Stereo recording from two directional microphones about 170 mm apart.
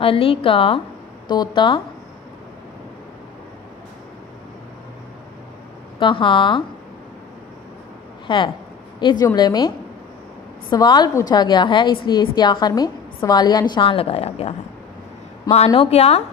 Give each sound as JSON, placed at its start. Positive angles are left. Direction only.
{"t": 0.0, "sound": "a woman's voice", "side_deg": 35}
{"t": 5.9, "sound": "a woman's voice", "side_deg": 30}
{"t": 8.3, "sound": "a woman's voice", "side_deg": 30}
{"t": 15.7, "sound": "a woman's voice", "side_deg": 35}